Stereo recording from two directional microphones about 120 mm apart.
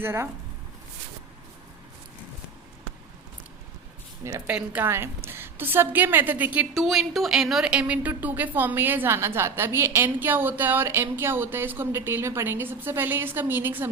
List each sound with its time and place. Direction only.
0.0 s speech: 20° right (ahead or behind)
4.2 s a woman's voice: 25° right (ahead or behind)
4.4 s a woman's voice: 15° right (ahead or behind)
6.7 s a woman's voice: centre (ahead or behind); by 13.8 s 15° right (ahead or behind)